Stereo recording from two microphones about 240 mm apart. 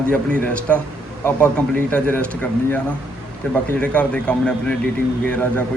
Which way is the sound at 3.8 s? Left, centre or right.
Centre.